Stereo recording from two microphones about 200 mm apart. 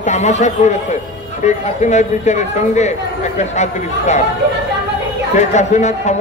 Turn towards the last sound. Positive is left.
turn(degrees=35)  # may be behind; listen again after turning